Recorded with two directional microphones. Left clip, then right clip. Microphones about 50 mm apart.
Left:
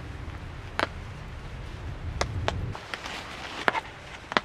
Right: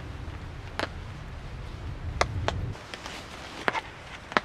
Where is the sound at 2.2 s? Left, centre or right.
Right.